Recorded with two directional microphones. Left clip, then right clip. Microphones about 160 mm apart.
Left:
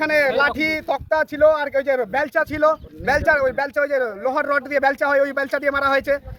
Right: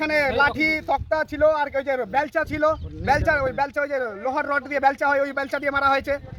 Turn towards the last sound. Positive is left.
turn(degrees=20)  # may be behind; listen again after turning